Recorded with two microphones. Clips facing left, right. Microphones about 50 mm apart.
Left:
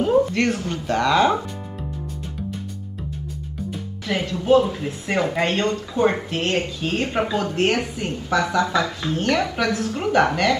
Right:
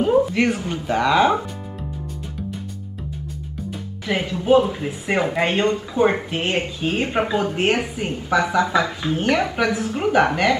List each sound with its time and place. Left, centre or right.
0.0 s speech: centre
4.1 s speech: centre